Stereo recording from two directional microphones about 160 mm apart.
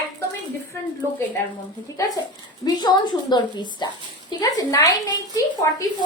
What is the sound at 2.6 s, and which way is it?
A woman's voice, 25° left (ahead or behind).